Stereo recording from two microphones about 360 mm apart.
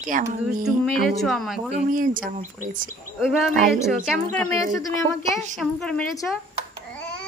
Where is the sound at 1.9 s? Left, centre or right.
Right.